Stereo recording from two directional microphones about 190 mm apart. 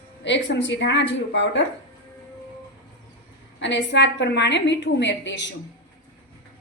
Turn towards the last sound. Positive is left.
turn(degrees=65)  # may be behind; listen again after turning